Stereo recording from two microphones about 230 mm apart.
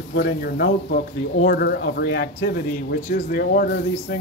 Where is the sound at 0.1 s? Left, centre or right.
Left.